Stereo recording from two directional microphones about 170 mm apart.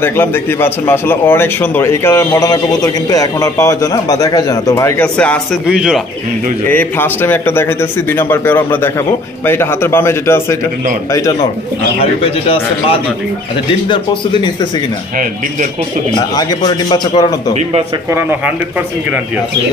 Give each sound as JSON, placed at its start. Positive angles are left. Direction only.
{"t": 0.0, "sound": "a man's voice", "side_deg": 15}
{"t": 5.0, "sound": "a man's voice", "side_deg": 5}
{"t": 5.7, "sound": "speech", "side_deg": -5}
{"t": 6.7, "sound": "a man's voice", "side_deg": 10}
{"t": 12.0, "sound": "speech", "side_deg": 35}
{"t": 16.3, "sound": "a man's voice", "side_deg": 25}